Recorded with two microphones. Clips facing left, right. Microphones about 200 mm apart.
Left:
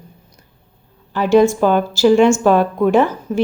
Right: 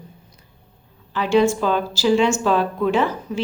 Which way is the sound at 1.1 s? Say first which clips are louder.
Left 5 dB; 45° left (ahead or behind).